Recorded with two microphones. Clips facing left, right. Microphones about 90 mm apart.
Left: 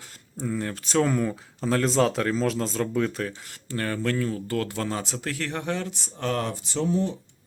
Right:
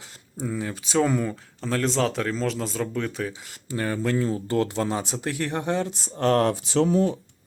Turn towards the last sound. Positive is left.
turn(degrees=-90)